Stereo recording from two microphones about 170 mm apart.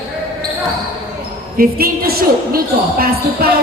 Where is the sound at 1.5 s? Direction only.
60° right (ahead or behind).